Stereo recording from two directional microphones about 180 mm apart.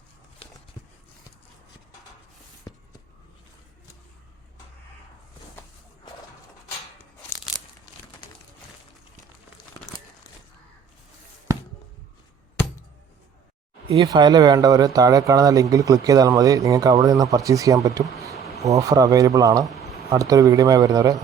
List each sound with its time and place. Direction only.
7.0 s tearing: 10° left (ahead or behind)
13.8 s speech: 25° right (ahead or behind)